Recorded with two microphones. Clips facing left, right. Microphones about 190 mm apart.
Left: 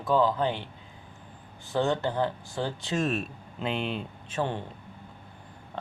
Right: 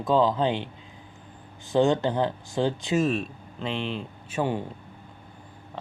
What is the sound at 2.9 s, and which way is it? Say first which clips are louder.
Speech: right 2 dB; centre (ahead or behind).